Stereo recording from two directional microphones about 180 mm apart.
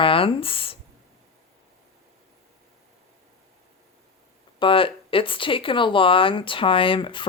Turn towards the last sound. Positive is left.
turn(degrees=25)  # may be behind; listen again after turning